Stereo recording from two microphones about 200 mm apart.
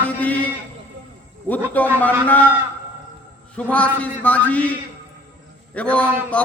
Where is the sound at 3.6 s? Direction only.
5° left (ahead or behind).